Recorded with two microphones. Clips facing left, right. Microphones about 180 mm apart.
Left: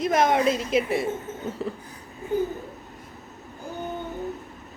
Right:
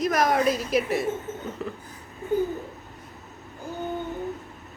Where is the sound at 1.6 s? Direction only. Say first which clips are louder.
Left 3 dB; 30° left (ahead or behind).